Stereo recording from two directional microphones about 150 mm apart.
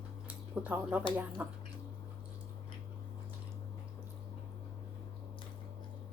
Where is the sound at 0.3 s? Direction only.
10° right (ahead or behind).